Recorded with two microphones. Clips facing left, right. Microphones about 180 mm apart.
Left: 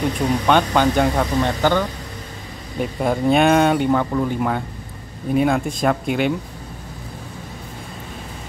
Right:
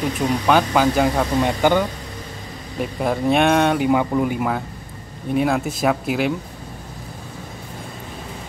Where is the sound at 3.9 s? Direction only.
10° right (ahead or behind).